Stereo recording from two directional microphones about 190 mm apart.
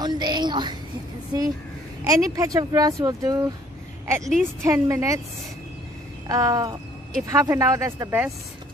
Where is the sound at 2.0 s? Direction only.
20° right (ahead or behind).